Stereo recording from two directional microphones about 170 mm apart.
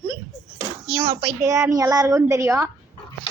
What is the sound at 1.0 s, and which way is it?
A woman's voice, 20° right (ahead or behind).